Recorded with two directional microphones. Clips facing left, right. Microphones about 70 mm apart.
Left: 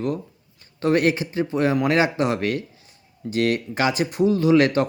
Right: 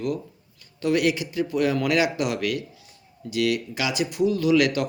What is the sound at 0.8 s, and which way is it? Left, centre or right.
Speech, left.